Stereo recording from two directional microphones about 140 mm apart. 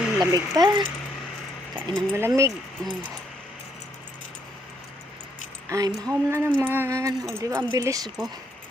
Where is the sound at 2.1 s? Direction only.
20° right (ahead or behind).